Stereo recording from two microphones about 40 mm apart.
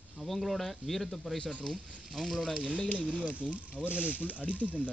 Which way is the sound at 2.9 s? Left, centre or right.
Right.